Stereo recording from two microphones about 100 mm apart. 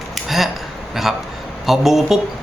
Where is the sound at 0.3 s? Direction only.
Centre (ahead or behind).